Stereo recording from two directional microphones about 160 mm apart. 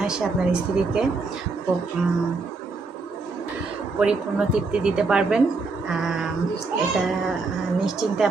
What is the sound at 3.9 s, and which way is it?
A woman's voice, 5° right (ahead or behind).